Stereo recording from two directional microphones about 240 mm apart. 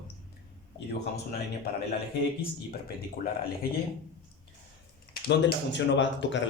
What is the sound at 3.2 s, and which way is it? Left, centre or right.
Speech, left.